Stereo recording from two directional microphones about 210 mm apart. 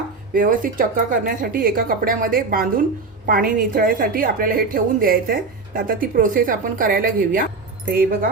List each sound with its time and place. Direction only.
0.3 s a woman's voice: 40° right (ahead or behind)